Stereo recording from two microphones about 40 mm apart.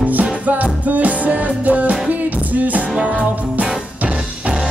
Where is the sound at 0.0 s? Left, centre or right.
Right.